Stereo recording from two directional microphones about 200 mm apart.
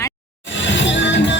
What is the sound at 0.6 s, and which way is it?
Music, 65° left (ahead or behind).